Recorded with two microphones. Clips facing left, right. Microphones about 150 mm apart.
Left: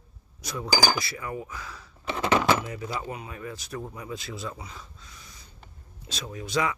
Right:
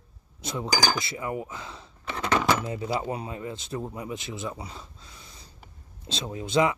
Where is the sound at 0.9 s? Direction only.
25° right (ahead or behind).